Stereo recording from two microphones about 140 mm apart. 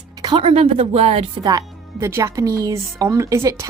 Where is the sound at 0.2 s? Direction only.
35° right (ahead or behind).